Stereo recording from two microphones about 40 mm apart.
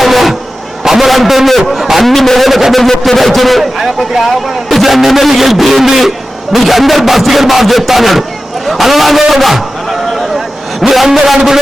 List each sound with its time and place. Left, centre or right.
0.0 s music: centre
0.9 s a sound: centre
1.5 s a man's voice: centre
2.8 s a man's voice: centre
10.8 s a man's voice: centre